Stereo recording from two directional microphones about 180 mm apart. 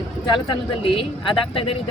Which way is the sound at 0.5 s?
30° left (ahead or behind).